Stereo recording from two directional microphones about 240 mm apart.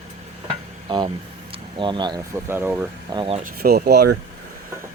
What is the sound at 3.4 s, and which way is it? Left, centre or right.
Speech, right.